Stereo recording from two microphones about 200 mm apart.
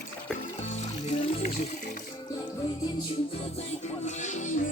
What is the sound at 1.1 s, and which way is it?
Music, 35° left (ahead or behind).